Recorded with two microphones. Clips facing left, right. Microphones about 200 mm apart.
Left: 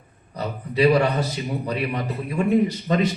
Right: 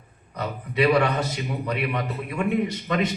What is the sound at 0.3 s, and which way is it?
A man's voice, 35° left (ahead or behind).